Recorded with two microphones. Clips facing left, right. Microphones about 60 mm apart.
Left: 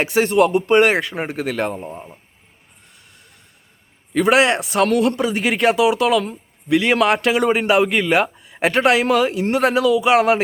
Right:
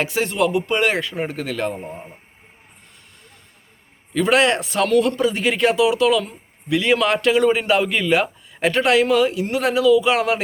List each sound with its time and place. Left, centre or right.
0.0 s a man's voice: left
4.1 s a man's voice: left
4.7 s a man's voice: left
5.2 s a man's voice: left